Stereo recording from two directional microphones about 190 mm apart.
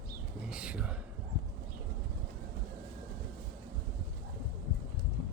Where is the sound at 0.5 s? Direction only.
5° right (ahead or behind).